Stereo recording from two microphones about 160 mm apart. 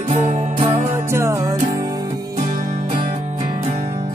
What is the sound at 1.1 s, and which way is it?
Music, 15° right (ahead or behind).